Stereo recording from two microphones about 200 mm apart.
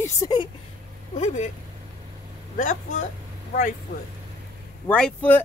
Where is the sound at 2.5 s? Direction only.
40° left (ahead or behind).